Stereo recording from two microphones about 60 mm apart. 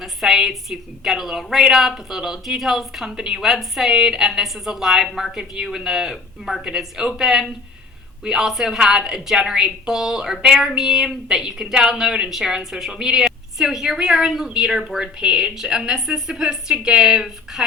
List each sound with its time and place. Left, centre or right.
0.0 s speech: centre